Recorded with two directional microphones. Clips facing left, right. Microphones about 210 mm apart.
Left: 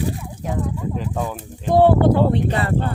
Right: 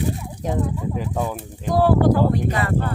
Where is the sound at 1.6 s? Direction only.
25° left (ahead or behind).